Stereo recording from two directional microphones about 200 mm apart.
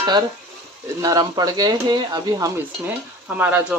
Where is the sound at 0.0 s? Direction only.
20° right (ahead or behind).